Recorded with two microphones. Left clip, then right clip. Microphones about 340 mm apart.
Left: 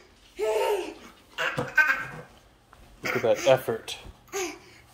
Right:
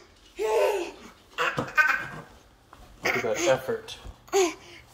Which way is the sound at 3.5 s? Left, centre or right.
Left.